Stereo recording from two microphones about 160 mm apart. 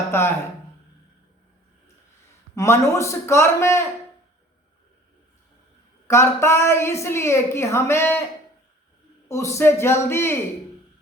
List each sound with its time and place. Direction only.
0.1 s speech: 15° left (ahead or behind)
2.6 s a woman's voice: 15° left (ahead or behind)
6.1 s a woman's voice: 15° left (ahead or behind)
9.3 s a woman's voice: 20° left (ahead or behind)